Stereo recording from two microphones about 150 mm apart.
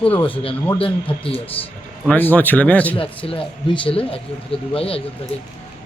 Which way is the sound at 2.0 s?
10° left (ahead or behind).